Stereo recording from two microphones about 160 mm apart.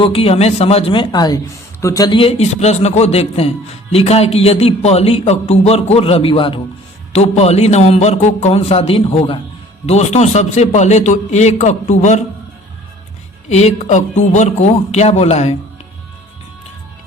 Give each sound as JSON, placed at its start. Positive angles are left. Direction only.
{"t": 0.0, "sound": "speech", "side_deg": 35}
{"t": 9.8, "sound": "a man's voice", "side_deg": 45}
{"t": 13.5, "sound": "a man's voice", "side_deg": 45}